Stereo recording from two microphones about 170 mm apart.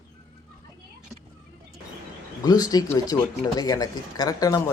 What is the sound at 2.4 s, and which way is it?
Speech, 20° left (ahead or behind).